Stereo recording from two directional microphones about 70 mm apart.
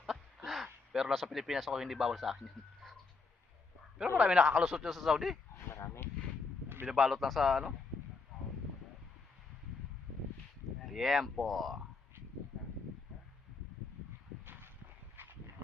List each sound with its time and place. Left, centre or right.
0.0 s a sound: centre
1.2 s speech: centre
4.2 s speech: centre
4.6 s speech: centre
5.5 s a sound: left
6.9 s speech: centre
10.8 s speech: centre
15.1 s dog: right